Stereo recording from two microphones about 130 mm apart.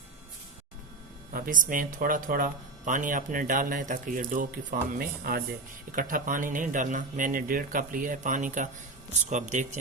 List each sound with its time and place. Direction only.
1.3 s speech: 90° right
9.1 s speech: 65° right (ahead or behind)